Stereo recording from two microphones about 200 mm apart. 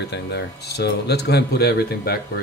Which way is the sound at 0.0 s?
55° left (ahead or behind).